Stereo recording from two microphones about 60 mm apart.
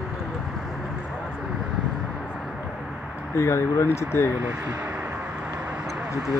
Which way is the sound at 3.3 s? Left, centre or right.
Left.